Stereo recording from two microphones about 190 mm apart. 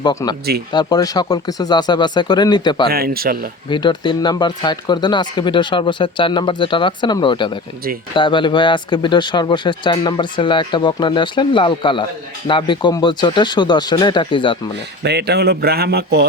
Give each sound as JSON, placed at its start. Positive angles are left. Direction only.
{"t": 0.0, "sound": "speech", "side_deg": 20}
{"t": 2.9, "sound": "speech", "side_deg": -55}
{"t": 3.7, "sound": "speech", "side_deg": 25}
{"t": 15.0, "sound": "speech", "side_deg": -60}